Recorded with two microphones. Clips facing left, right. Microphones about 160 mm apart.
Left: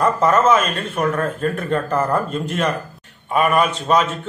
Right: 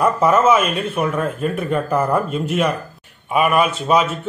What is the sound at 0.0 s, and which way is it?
A man's voice, 10° right (ahead or behind).